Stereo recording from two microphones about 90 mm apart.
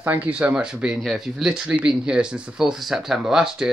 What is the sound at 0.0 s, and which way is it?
Speech, 20° right (ahead or behind).